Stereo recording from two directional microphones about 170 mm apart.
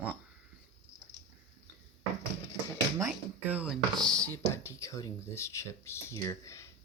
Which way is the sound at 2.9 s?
10° right (ahead or behind).